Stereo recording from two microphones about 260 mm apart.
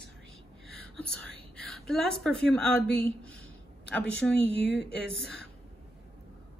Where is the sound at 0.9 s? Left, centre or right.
Centre.